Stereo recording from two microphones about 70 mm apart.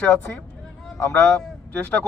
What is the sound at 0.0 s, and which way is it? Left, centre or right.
Speech, left.